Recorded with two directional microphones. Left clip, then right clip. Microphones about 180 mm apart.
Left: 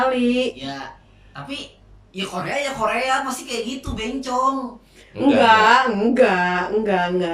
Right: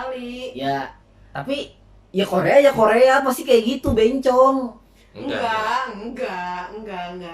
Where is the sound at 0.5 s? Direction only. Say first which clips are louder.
Right 7 dB; 45° right (ahead or behind).